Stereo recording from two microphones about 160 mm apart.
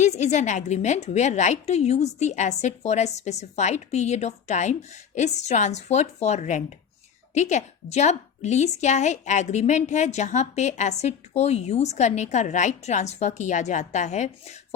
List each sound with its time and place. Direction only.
0.0 s a woman's voice: 45° left (ahead or behind)